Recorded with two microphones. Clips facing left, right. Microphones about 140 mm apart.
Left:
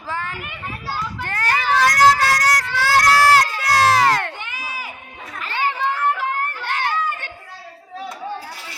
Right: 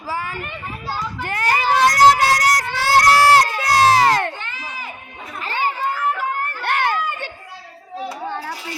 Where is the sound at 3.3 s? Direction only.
20° right (ahead or behind).